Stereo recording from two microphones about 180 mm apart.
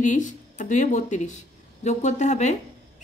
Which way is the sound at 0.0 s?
45° left (ahead or behind).